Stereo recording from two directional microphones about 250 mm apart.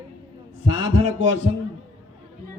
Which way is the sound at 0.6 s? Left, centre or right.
Right.